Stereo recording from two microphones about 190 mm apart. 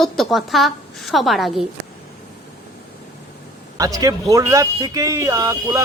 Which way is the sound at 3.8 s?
20° right (ahead or behind).